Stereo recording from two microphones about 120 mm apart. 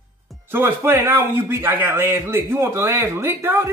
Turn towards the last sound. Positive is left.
turn(degrees=-20)  # may be behind; listen again after turning